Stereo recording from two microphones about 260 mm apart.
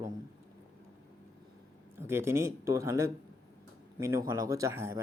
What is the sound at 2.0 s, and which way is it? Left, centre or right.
Speech, centre.